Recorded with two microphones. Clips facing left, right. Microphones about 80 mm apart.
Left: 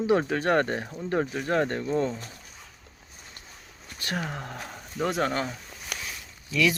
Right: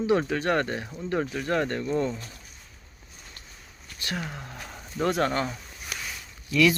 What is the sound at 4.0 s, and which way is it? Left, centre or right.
Speech, left.